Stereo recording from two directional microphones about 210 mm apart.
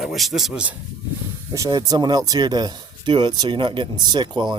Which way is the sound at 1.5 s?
15° right (ahead or behind).